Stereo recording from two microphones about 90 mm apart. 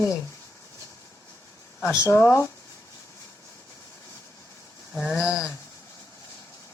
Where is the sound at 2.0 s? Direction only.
25° left (ahead or behind).